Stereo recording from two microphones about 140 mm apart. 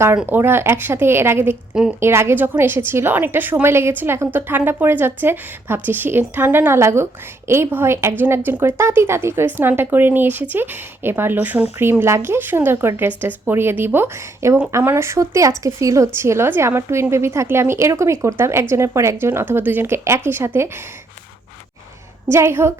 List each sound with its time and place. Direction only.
0.3 s speech: 15° right (ahead or behind)
22.3 s a woman's voice: 20° right (ahead or behind)